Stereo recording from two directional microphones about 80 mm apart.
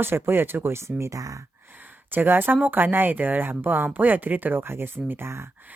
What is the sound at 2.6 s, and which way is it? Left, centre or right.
Speech, right.